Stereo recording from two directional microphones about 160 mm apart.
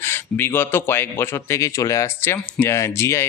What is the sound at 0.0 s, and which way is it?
Speech, 15° left (ahead or behind).